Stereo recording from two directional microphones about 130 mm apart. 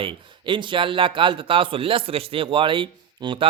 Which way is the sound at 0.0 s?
40° right (ahead or behind).